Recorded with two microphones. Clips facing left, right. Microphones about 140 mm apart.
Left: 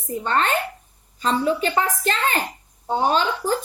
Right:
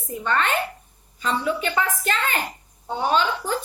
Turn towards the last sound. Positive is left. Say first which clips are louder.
# left 1 dB
turn(degrees=40)  # may be behind; listen again after turning